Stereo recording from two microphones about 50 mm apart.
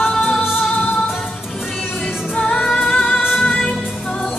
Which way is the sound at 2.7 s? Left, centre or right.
Left.